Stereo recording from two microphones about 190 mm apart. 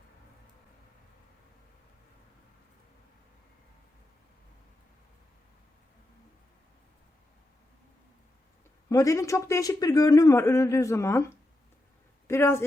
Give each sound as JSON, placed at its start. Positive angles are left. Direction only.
{"t": 8.9, "sound": "a man's voice", "side_deg": 15}
{"t": 12.3, "sound": "a man's voice", "side_deg": 15}